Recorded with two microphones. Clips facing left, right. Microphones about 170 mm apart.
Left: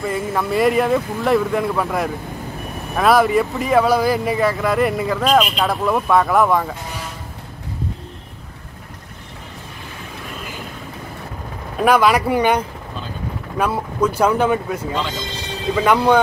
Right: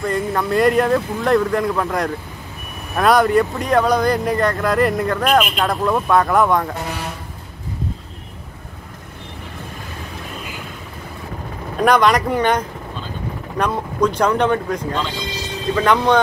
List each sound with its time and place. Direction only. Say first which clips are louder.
0.0 s speech: right 1 dB; 5° left (ahead or behind)
11.8 s speech: even; 5° left (ahead or behind)